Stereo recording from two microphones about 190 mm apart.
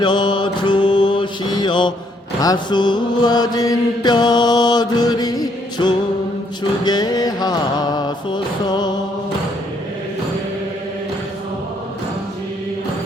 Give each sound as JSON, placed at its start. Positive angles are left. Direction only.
{"t": 0.0, "sound": "mantra", "side_deg": 25}
{"t": 6.8, "sound": "music", "side_deg": 20}